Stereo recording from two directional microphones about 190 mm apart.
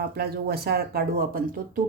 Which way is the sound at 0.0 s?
55° right (ahead or behind).